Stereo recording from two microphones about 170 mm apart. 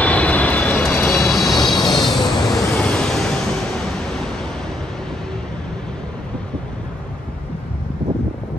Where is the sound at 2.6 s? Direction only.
15° left (ahead or behind).